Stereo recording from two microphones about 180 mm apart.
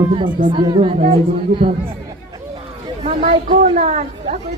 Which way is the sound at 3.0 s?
35° right (ahead or behind).